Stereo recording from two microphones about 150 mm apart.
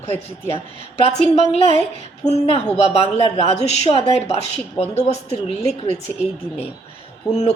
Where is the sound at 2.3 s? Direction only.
45° left (ahead or behind).